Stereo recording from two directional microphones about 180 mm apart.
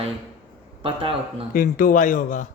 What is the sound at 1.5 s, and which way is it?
Speech, 50° left (ahead or behind).